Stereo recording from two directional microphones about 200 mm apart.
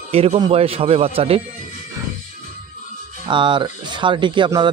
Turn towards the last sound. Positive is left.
turn(degrees=-20)  # may be behind; listen again after turning